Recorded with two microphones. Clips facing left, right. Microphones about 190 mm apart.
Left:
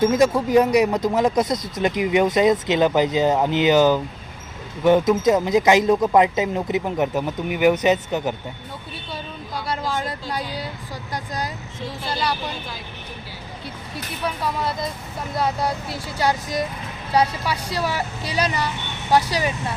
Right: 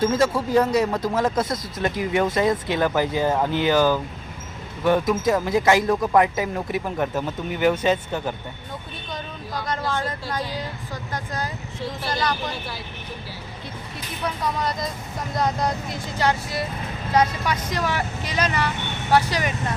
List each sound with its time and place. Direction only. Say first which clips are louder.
0.0 s speech: left 3 dB; 15° left (ahead or behind)
9.6 s speech: even; 10° left (ahead or behind)
12.1 s speech: left 1 dB; 10° left (ahead or behind)
14.4 s speech: even; 5° left (ahead or behind)